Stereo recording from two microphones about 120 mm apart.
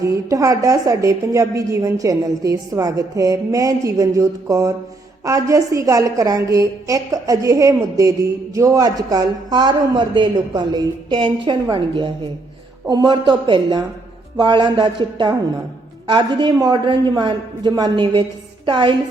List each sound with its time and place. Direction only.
0.0 s a woman's voice: 25° right (ahead or behind); by 18.9 s 45° right (ahead or behind)